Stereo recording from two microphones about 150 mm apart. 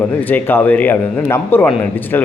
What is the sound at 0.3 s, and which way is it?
Speech, 10° left (ahead or behind).